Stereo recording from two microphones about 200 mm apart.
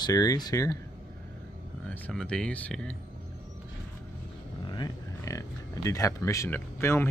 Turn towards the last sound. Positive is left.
turn(degrees=10)  # may be behind; listen again after turning